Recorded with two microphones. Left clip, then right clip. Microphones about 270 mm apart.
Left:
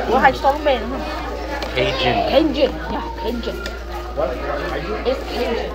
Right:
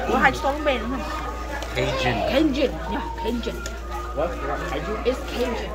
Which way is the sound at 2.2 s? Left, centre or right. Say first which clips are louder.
Left 4 dB; right.